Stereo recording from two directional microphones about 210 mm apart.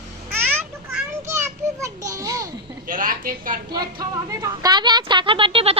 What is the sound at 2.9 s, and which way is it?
Speech, 40° right (ahead or behind).